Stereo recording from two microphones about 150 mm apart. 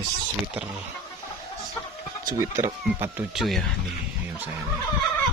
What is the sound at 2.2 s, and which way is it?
A man's voice, 20° right (ahead or behind).